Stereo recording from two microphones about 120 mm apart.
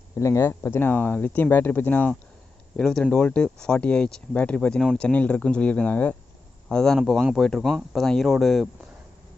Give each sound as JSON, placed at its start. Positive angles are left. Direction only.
{"t": 0.2, "sound": "speech", "side_deg": 25}